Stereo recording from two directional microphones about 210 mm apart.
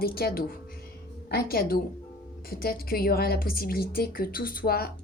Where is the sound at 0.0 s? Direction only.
45° left (ahead or behind).